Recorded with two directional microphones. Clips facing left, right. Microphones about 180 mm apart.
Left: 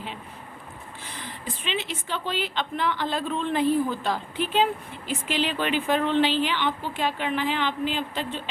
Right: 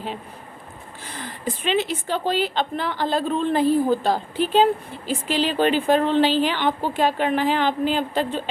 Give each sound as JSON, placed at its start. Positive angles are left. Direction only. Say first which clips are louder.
{"t": 1.6, "sound": "a woman's voice", "louder": "right 8 dB", "side_deg": -40}